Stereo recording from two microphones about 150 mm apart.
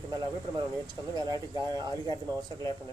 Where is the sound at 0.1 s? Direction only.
30° right (ahead or behind).